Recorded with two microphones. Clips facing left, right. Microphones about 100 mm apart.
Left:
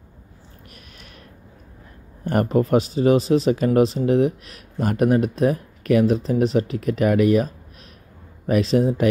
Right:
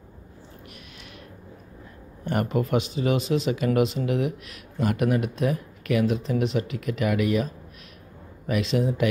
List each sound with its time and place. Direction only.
2.2 s speech: 40° left (ahead or behind)